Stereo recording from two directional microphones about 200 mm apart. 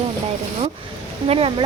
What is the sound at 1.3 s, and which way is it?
Speech, 30° right (ahead or behind).